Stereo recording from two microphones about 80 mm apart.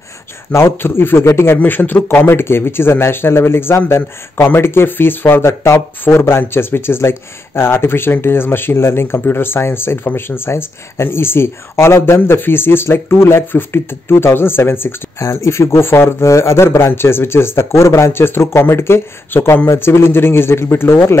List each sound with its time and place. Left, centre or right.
0.5 s speech: left
1.6 s speech: left